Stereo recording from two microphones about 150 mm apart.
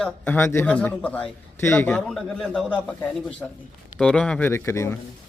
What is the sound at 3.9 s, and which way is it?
Speech, 5° left (ahead or behind).